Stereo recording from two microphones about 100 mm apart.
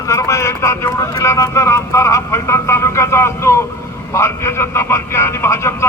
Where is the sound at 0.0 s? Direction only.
30° left (ahead or behind).